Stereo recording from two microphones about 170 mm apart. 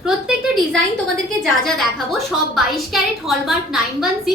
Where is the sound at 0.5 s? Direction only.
5° left (ahead or behind).